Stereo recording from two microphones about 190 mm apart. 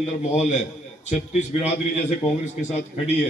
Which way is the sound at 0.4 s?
35° left (ahead or behind).